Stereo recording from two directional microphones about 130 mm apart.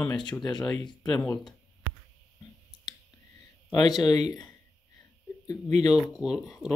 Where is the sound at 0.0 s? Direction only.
35° left (ahead or behind).